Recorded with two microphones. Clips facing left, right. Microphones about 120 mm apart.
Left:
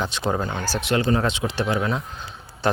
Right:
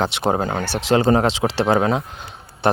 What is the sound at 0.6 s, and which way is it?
Speech, 65° right (ahead or behind).